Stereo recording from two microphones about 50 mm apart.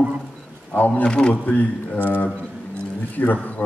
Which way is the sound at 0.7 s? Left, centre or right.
Left.